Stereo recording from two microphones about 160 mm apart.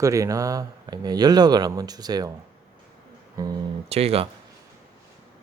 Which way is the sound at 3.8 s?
40° right (ahead or behind).